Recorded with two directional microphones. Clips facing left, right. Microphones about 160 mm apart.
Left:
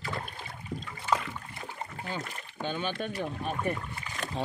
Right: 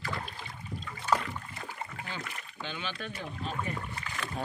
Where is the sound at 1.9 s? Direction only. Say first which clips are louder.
Left 3 dB; 40° left (ahead or behind).